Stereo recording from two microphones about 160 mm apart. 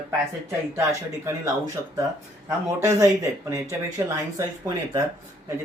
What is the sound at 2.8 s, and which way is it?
Speech, 20° right (ahead or behind).